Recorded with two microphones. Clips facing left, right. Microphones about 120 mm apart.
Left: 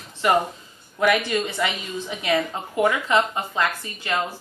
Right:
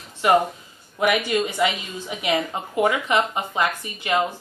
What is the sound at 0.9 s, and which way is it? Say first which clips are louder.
A woman's voice: even; 15° right (ahead or behind).